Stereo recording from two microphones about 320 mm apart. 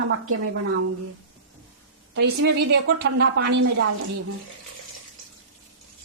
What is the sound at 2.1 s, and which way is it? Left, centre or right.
Speech, right.